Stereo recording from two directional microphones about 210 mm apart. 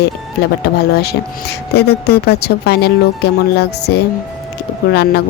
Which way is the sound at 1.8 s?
50° left (ahead or behind).